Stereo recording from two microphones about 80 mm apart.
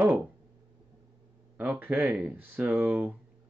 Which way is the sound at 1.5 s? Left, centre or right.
Right.